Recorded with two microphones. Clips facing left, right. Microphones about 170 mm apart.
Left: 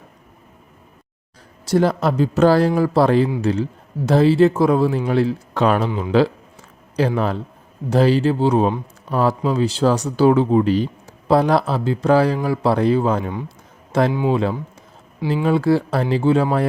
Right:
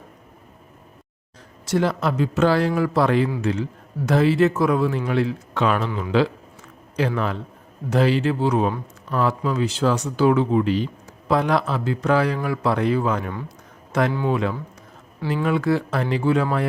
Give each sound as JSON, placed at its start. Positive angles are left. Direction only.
{"t": 1.6, "sound": "speech", "side_deg": 40}